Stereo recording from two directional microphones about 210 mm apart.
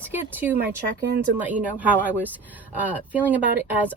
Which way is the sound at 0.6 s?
50° right (ahead or behind).